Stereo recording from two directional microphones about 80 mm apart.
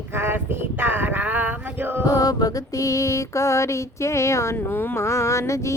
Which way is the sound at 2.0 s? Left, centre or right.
Left.